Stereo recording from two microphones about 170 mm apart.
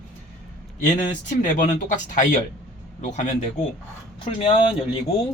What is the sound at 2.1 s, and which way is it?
Speech, 50° left (ahead or behind).